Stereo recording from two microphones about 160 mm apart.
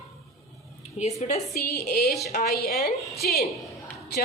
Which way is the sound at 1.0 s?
45° left (ahead or behind).